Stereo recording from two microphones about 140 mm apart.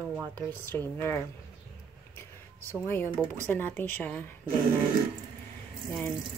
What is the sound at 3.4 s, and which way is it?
Speech, 15° left (ahead or behind).